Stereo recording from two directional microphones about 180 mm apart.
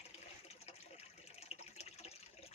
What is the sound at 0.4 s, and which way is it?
Water, 35° left (ahead or behind).